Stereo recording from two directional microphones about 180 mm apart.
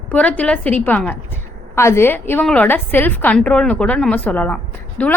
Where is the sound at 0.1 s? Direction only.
10° left (ahead or behind).